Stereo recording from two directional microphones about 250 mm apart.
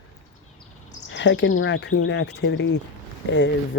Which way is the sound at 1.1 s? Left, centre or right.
Left.